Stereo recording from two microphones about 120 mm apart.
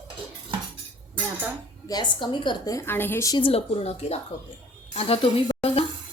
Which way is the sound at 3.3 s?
50° left (ahead or behind).